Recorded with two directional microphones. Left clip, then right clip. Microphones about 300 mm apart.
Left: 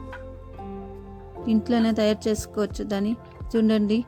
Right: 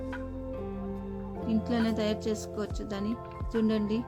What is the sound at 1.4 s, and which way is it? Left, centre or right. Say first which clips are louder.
Speech: left 7 dB; left.